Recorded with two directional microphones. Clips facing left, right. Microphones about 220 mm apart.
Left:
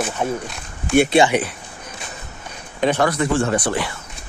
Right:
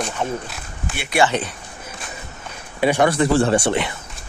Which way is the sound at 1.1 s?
15° left (ahead or behind).